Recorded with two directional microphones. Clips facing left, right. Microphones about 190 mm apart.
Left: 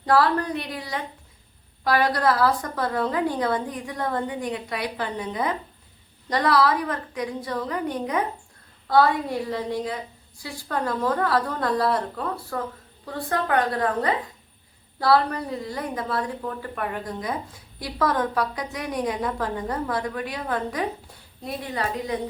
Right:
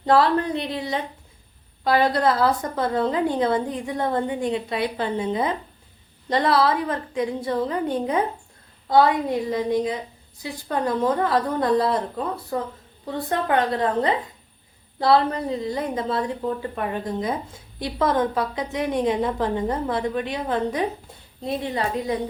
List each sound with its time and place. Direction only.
0.0 s a woman's voice: 25° right (ahead or behind)